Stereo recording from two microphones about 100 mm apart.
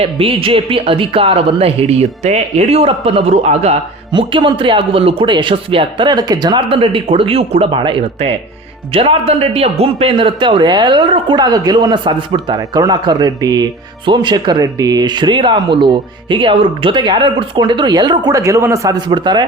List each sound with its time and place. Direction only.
0.0 s a man's voice: 65° right (ahead or behind); by 3.8 s 90° right
4.1 s a man's voice: 55° right (ahead or behind)
6.7 s a man's voice: 60° right (ahead or behind)
12.5 s speech: 40° right (ahead or behind)
18.9 s speech: 50° right (ahead or behind)